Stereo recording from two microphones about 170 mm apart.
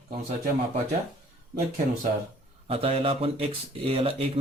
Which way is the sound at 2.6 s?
35° right (ahead or behind).